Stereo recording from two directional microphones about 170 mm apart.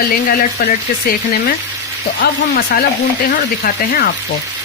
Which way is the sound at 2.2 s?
70° left (ahead or behind).